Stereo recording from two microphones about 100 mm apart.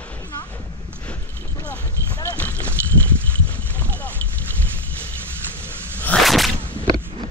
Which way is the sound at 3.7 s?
15° left (ahead or behind).